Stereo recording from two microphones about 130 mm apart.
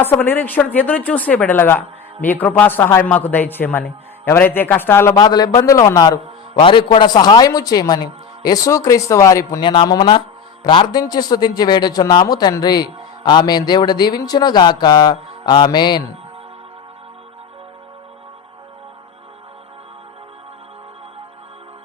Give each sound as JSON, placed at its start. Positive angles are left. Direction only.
{"t": 0.0, "sound": "a man's voice", "side_deg": 15}
{"t": 9.6, "sound": "a man's voice", "side_deg": 35}